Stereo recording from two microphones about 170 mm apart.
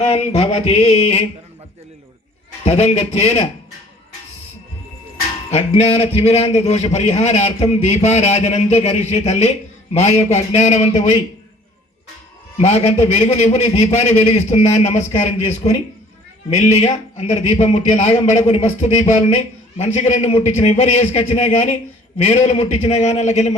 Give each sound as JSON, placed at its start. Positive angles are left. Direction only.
{"t": 0.0, "sound": "a man's voice", "side_deg": 35}
{"t": 2.6, "sound": "a man's voice", "side_deg": 35}
{"t": 5.5, "sound": "a man's voice", "side_deg": 40}
{"t": 12.5, "sound": "a man's voice", "side_deg": 40}